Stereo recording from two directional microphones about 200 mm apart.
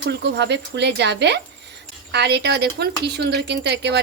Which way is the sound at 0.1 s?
60° right (ahead or behind).